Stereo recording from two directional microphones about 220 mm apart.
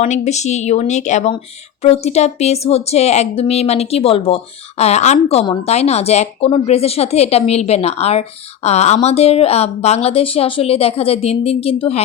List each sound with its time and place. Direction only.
0.0 s speech: 30° left (ahead or behind)